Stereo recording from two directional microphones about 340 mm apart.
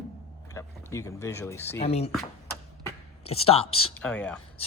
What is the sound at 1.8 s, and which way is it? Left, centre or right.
Speech, centre.